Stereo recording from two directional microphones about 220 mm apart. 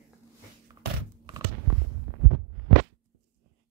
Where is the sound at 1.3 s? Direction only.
20° right (ahead or behind).